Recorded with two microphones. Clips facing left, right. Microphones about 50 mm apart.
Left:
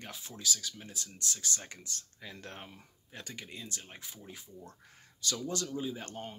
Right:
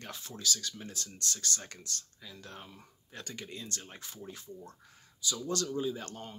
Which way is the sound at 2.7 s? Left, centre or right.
Centre.